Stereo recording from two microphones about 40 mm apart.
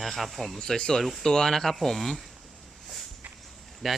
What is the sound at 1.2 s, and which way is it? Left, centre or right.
Speech, centre.